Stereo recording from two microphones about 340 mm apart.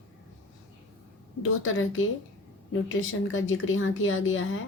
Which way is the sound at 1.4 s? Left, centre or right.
Left.